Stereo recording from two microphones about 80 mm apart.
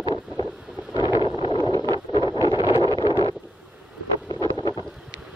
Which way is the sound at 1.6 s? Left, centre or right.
Left.